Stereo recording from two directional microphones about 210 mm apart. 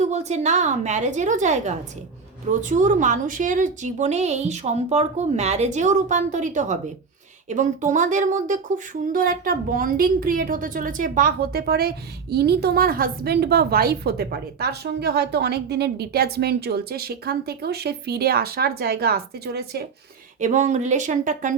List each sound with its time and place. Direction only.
0.0 s a woman's voice: 30° right (ahead or behind); by 19.8 s 50° right (ahead or behind)
20.4 s a woman's voice: 35° right (ahead or behind)